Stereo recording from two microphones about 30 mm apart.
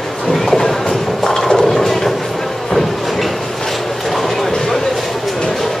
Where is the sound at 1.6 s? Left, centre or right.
Centre.